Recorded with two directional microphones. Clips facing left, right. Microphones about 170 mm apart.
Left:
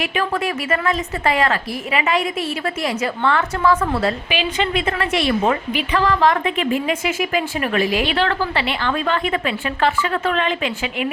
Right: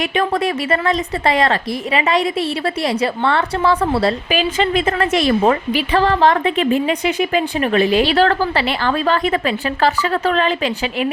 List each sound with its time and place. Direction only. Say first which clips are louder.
0.0 s a woman's voice: right 4 dB; 35° right (ahead or behind)